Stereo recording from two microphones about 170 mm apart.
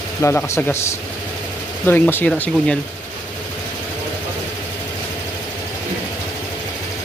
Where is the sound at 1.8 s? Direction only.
10° left (ahead or behind).